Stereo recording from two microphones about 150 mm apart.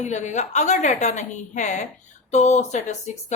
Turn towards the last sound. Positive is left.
turn(degrees=50)  # may be behind; listen again after turning